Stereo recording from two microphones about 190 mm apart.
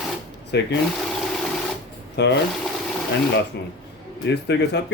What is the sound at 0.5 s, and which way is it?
Speech, 60° left (ahead or behind).